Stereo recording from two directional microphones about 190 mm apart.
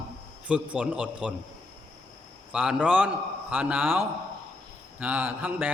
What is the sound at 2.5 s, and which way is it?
Speech, 5° right (ahead or behind).